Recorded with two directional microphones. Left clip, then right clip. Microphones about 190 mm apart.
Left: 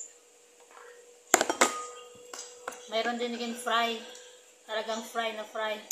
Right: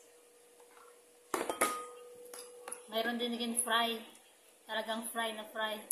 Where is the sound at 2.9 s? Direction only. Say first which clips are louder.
Left 5 dB; 20° right (ahead or behind).